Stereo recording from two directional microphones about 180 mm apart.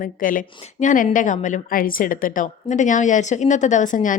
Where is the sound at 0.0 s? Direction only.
50° left (ahead or behind).